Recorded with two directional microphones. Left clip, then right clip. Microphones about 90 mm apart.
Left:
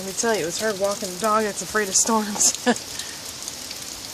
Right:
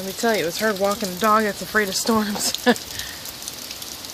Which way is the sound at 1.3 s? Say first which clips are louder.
Right 2 dB; 25° right (ahead or behind).